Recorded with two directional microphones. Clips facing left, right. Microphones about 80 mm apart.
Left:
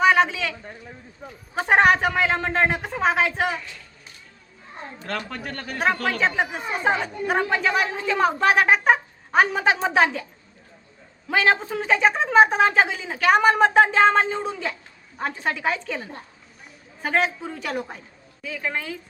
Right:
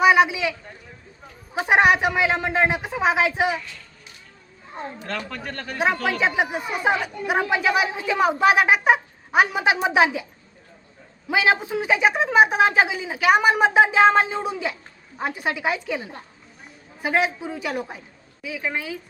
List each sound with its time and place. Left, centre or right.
0.0 s a sound: centre
1.5 s a woman's voice: centre
5.0 s speech: centre
5.7 s a woman's voice: centre
6.6 s speech: left
7.0 s a woman's voice: centre
11.3 s a woman's voice: centre